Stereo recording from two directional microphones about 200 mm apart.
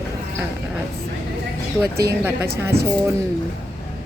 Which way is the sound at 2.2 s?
10° right (ahead or behind).